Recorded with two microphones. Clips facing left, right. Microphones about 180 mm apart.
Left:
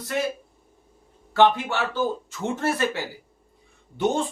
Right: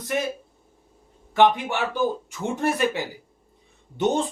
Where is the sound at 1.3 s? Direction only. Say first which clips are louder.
Even; 15° right (ahead or behind).